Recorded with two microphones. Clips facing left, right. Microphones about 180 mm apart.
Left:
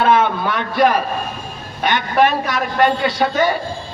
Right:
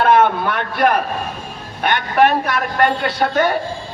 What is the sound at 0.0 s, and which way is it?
A man's voice, 55° right (ahead or behind).